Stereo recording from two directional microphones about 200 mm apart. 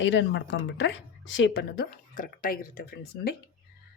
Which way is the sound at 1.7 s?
45° left (ahead or behind).